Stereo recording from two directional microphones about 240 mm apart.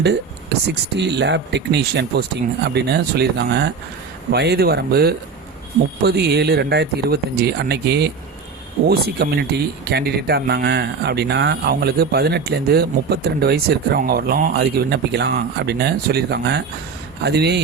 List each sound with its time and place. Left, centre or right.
0.7 s speech: right